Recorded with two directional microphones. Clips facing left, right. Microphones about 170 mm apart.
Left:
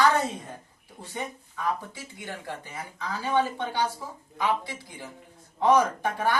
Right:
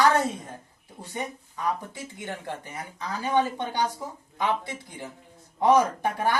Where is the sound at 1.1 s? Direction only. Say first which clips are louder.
Right 1 dB; 15° right (ahead or behind).